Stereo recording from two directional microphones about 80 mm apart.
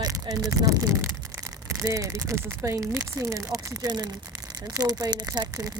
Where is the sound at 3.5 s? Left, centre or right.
Right.